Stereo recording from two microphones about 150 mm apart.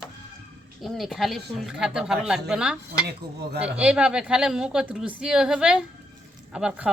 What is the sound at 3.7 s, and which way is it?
Speech, 5° right (ahead or behind).